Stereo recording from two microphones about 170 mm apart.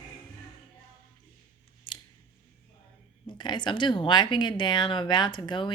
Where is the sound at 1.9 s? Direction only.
25° left (ahead or behind).